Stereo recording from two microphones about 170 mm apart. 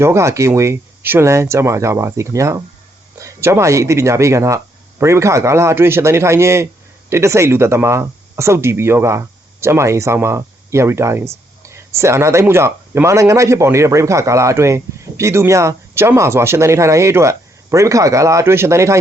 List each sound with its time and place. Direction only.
0.0 s a man's voice: 15° right (ahead or behind)